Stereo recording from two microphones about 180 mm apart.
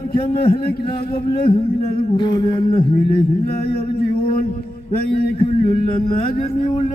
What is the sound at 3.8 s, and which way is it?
Speech, 30° left (ahead or behind).